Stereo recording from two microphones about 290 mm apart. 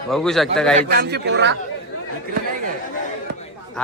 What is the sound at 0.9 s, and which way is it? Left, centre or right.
Speech, right.